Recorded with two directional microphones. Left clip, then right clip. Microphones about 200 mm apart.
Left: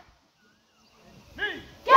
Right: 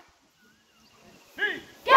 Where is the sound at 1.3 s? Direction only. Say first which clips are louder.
Right 3 dB; 35° right (ahead or behind).